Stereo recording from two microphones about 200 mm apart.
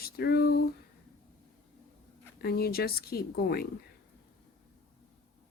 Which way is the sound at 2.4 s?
50° left (ahead or behind).